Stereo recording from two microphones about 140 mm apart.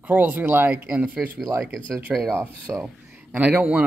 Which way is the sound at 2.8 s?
5° right (ahead or behind).